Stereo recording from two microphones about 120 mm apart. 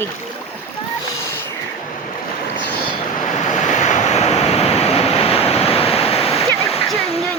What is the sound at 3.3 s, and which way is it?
Waves, 80° left.